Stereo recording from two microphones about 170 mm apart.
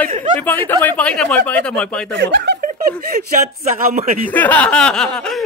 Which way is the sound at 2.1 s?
90° right.